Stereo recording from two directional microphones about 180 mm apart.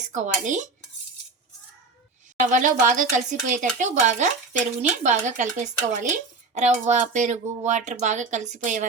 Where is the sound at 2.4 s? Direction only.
45° right (ahead or behind).